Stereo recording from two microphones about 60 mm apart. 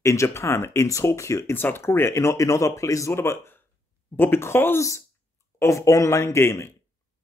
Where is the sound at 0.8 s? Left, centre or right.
Left.